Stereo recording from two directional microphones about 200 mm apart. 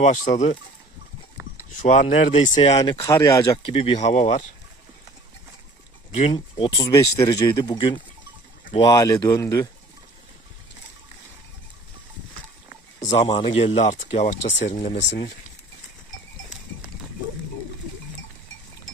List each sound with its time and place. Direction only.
0.0 s speech: 35° left (ahead or behind)
1.8 s speech: 40° left (ahead or behind)
3.0 s speech: 15° left (ahead or behind); by 4.4 s 35° left (ahead or behind)
6.3 s speech: 20° left (ahead or behind)
13.0 s speech: 30° left (ahead or behind)